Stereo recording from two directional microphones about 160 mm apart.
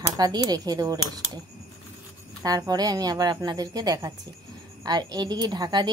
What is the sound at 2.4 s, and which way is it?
A woman's voice, 25° right (ahead or behind).